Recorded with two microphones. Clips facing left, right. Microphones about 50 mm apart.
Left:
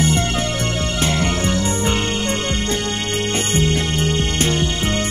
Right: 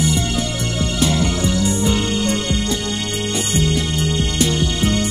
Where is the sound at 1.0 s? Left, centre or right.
Left.